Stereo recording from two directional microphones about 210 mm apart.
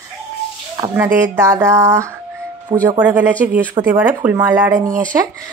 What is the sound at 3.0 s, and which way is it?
Speech, 5° right (ahead or behind).